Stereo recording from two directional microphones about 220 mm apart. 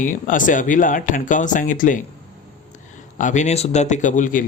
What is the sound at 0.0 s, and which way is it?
Speech, 35° left (ahead or behind).